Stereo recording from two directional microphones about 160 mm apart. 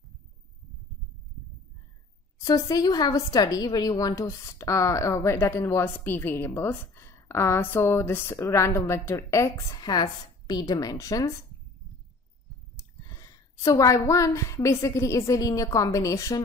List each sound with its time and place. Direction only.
2.4 s a woman's voice: 25° left (ahead or behind)
13.0 s a woman's voice: 20° left (ahead or behind)